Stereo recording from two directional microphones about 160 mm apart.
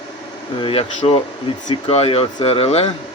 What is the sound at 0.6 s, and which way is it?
Speech, 35° left (ahead or behind).